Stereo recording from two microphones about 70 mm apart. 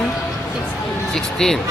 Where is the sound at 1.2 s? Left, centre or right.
Centre.